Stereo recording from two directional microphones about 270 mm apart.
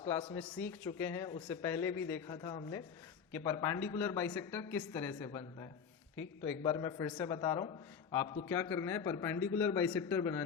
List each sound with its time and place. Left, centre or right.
0.0 s speech: centre
0.4 s a man's voice: centre